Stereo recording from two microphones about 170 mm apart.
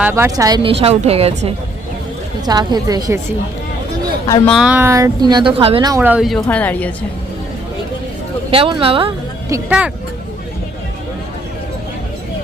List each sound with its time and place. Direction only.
0.0 s speech: 15° right (ahead or behind); by 1.5 s 35° right (ahead or behind)
2.4 s speech: 25° right (ahead or behind)
4.4 s speech: centre (ahead or behind); by 5.9 s 30° right (ahead or behind)
5.9 s speech: 10° right (ahead or behind); by 6.9 s 10° left (ahead or behind)
8.4 s speech: 30° right (ahead or behind)
9.5 s speech: 10° right (ahead or behind)